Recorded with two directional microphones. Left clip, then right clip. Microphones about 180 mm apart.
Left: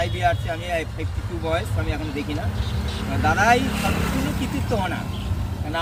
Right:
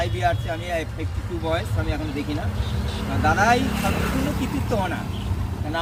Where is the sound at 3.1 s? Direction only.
Centre (ahead or behind).